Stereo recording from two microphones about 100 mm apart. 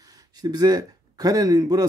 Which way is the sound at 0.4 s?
40° right (ahead or behind).